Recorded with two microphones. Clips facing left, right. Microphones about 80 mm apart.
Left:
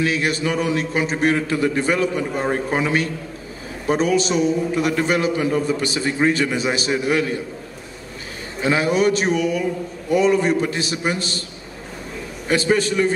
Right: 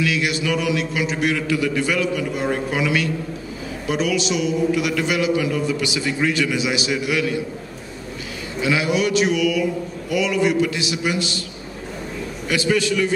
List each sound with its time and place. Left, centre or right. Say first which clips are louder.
0.0 s a man's voice: left 1 dB; left
8.5 s a man's voice: left 2 dB; left
12.4 s a man's voice: left 2 dB; left